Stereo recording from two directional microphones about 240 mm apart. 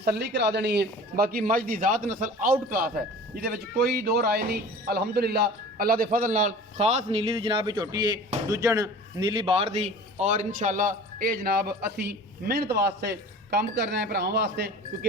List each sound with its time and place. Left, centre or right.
0.0 s a man's voice: right